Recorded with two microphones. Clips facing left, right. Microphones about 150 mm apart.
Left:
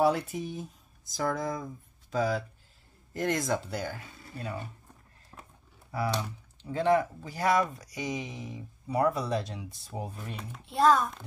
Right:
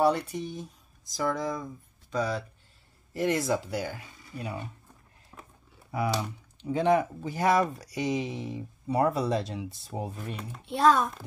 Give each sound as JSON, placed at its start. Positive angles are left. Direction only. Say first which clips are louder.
{"t": 0.0, "sound": "speech", "louder": "right 1 dB", "side_deg": 0}
{"t": 5.3, "sound": "a sound", "louder": "right 1 dB", "side_deg": 10}
{"t": 6.6, "sound": "speech", "louder": "right 1 dB", "side_deg": -20}
{"t": 10.7, "sound": "speech", "louder": "right 1 dB", "side_deg": -75}